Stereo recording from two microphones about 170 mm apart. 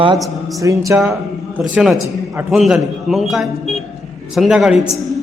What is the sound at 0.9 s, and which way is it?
A man's voice, 5° right (ahead or behind).